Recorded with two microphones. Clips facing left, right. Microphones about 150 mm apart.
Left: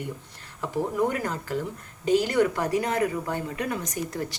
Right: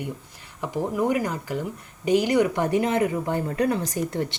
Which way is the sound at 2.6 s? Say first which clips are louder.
Right 3 dB; 25° right (ahead or behind).